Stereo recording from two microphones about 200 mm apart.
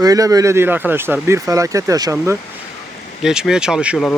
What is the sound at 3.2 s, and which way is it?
Speech, 5° right (ahead or behind).